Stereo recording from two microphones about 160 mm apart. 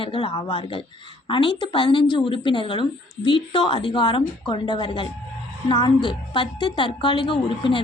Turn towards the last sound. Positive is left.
turn(degrees=35)  # may be behind; listen again after turning